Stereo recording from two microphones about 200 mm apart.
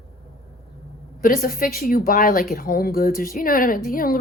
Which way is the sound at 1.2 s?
45° left (ahead or behind).